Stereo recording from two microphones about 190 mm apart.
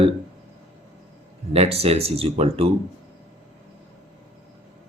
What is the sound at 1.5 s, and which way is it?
Speech, 30° right (ahead or behind).